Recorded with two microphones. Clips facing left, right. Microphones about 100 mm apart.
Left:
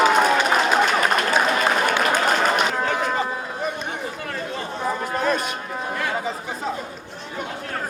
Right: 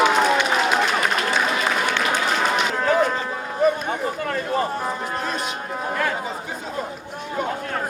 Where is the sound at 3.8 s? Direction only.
45° right (ahead or behind).